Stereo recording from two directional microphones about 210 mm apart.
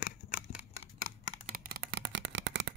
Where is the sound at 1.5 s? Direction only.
45° right (ahead or behind).